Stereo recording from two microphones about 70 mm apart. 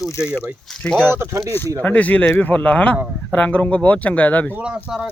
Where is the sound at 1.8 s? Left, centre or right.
Left.